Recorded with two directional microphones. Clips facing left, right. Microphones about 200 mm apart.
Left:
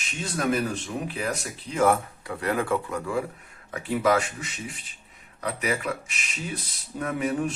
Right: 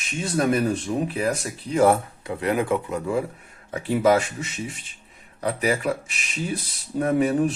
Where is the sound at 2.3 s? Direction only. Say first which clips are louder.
Right 3 dB; 20° right (ahead or behind).